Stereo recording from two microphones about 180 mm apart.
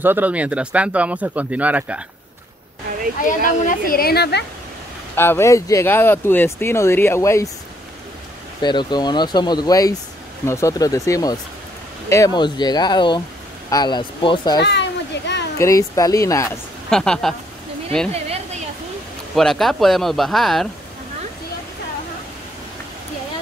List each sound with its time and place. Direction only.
0.0 s speech: 10° right (ahead or behind)
3.3 s a woman's voice: 50° left (ahead or behind); by 4.5 s 65° left (ahead or behind)
5.1 s speech: 10° left (ahead or behind)
8.6 s speech: 25° left (ahead or behind)
14.6 s children playing: 70° left (ahead or behind)
15.6 s speech: 20° left (ahead or behind)
16.9 s speech: 5° left (ahead or behind)
19.3 s speech: centre (ahead or behind)